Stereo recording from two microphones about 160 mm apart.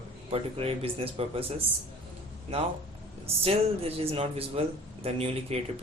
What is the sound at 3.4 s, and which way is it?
Speech, 35° right (ahead or behind).